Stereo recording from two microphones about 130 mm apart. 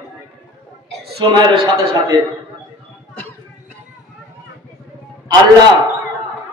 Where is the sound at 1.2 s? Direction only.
40° right (ahead or behind).